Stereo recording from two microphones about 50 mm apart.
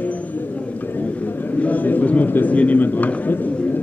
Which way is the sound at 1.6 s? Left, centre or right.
Left.